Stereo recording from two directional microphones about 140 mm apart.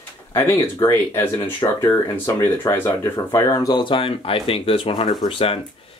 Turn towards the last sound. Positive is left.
turn(degrees=40)  # may be behind; listen again after turning